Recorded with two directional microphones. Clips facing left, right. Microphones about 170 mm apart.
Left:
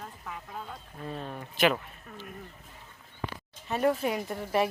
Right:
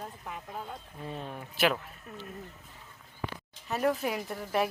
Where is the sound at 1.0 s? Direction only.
5° right (ahead or behind).